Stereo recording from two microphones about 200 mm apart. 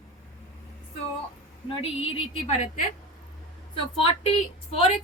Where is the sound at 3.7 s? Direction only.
30° left (ahead or behind).